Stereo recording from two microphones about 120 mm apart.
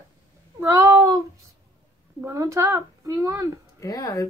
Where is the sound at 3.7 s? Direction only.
30° left (ahead or behind).